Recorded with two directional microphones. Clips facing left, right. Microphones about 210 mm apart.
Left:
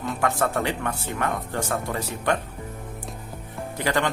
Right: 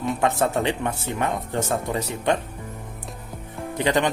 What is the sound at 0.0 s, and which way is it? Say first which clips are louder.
Speech: right 3 dB; 20° right (ahead or behind).